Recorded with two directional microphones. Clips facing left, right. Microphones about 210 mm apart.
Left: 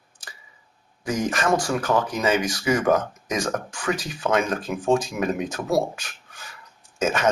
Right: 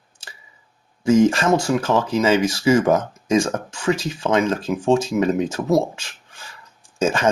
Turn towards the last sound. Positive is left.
turn(degrees=-30)  # may be behind; listen again after turning